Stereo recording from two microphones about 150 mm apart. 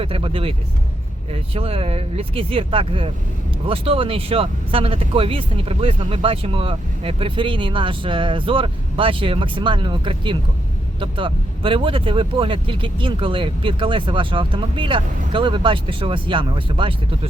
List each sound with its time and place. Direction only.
0.0 s speech: 35° right (ahead or behind)